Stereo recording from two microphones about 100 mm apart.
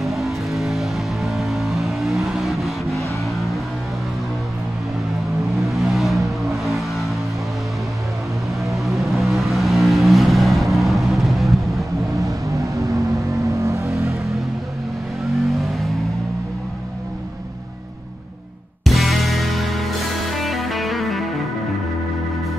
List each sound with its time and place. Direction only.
0.0 s vehicle: centre (ahead or behind)
3.3 s music: centre (ahead or behind)
5.6 s music: centre (ahead or behind)
8.6 s vehicle: centre (ahead or behind)
12.3 s vehicle: 30° right (ahead or behind)
15.3 s vehicle: centre (ahead or behind)
18.9 s music: centre (ahead or behind)